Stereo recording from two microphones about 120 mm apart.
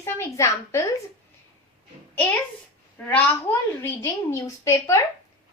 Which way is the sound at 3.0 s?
15° left (ahead or behind).